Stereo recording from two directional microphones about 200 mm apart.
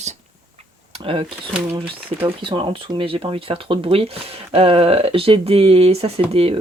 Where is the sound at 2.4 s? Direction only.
25° right (ahead or behind).